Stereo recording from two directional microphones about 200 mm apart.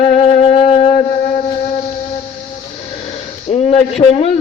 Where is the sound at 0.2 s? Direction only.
30° left (ahead or behind).